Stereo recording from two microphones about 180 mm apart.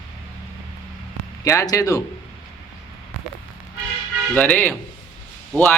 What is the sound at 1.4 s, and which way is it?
Speech, 15° left (ahead or behind).